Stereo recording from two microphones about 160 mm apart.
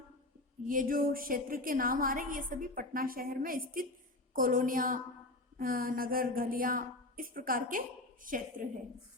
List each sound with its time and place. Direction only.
0.6 s a woman's voice: 60° right (ahead or behind)